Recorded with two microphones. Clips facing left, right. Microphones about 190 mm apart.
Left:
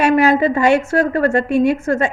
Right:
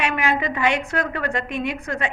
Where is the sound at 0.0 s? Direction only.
40° left (ahead or behind).